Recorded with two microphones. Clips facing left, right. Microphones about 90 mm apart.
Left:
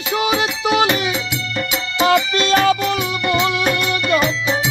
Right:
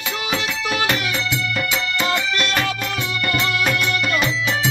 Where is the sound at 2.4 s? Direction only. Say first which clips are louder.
Left 7 dB; 25° left (ahead or behind).